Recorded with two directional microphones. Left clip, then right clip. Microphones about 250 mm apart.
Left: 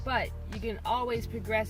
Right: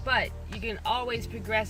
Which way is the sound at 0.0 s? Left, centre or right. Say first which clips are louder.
Right 4 dB; centre.